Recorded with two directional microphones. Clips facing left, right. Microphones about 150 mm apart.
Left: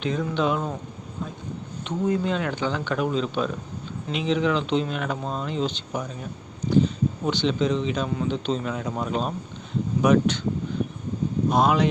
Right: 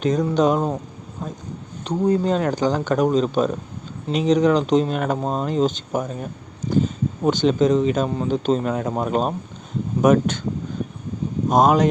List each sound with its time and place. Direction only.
0.0 s speech: 40° right (ahead or behind)
1.8 s speech: 35° right (ahead or behind)
11.4 s speech: 45° right (ahead or behind)